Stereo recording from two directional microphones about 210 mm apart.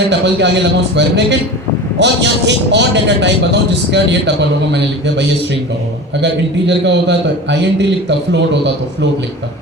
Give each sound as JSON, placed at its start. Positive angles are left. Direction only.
{"t": 0.1, "sound": "a man's voice", "side_deg": -55}
{"t": 6.2, "sound": "a man's voice", "side_deg": -55}